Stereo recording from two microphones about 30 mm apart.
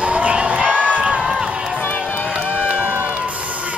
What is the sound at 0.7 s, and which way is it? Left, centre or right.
Music, right.